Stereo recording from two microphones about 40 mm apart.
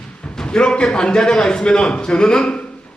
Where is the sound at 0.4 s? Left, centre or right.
Left.